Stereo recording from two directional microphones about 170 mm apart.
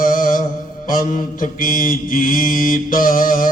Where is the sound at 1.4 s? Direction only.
55° left (ahead or behind).